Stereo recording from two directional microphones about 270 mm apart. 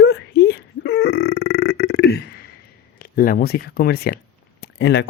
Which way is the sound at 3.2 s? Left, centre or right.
Left.